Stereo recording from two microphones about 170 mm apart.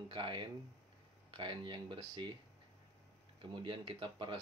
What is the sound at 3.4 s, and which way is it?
Speech, 30° right (ahead or behind).